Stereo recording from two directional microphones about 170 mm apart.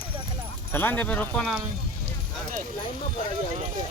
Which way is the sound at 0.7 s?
10° left (ahead or behind).